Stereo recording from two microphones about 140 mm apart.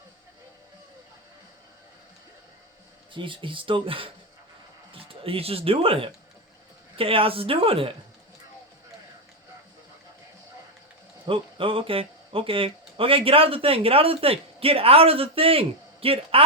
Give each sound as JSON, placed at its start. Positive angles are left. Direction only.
{"t": 3.1, "sound": "speech", "side_deg": -35}
{"t": 11.3, "sound": "a man's voice", "side_deg": -40}